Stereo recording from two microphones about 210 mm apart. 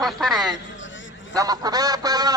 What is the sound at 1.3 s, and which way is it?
Goose, 20° right (ahead or behind).